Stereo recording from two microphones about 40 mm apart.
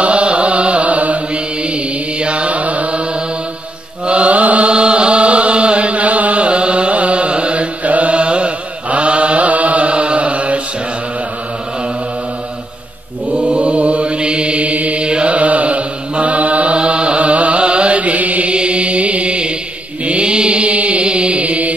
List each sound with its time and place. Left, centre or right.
0.0 s mantra: right
4.0 s chant: right
13.3 s mantra: right
18.5 s mantra: right